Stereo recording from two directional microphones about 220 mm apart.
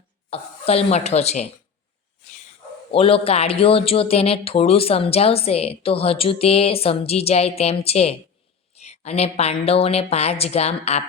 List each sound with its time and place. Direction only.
0.3 s speech: 25° left (ahead or behind)
2.9 s speech: 25° left (ahead or behind)